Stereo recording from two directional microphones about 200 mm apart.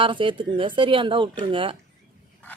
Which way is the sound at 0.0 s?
25° right (ahead or behind).